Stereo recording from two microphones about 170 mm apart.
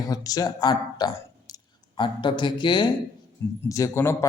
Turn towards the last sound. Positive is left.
turn(degrees=15)  # may be behind; listen again after turning